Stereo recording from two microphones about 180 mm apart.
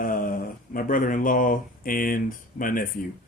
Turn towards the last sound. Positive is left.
turn(degrees=50)  # may be behind; listen again after turning